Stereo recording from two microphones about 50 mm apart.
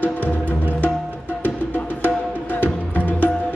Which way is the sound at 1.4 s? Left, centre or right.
Left.